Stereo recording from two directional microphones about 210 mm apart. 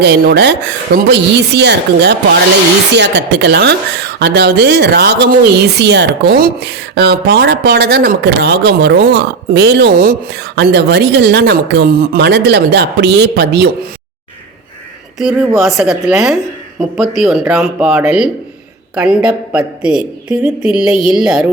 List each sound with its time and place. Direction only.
0.0 s speech: 50° right (ahead or behind)
15.2 s a woman's voice: 5° right (ahead or behind)